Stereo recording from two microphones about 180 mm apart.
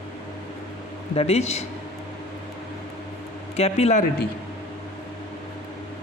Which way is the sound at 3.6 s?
35° left (ahead or behind).